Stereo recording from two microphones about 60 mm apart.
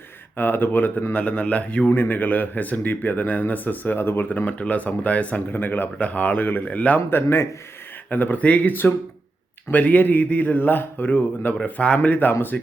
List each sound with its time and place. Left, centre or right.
0.3 s a man's voice: left
4.3 s speech: left
7.1 s a man's voice: left
8.1 s a man's voice: left